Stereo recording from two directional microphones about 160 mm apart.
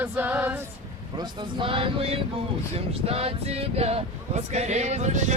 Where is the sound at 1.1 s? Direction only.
30° right (ahead or behind); by 5.3 s 50° right (ahead or behind).